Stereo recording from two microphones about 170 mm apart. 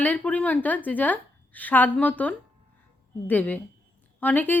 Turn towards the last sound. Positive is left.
turn(degrees=10)  # may be behind; listen again after turning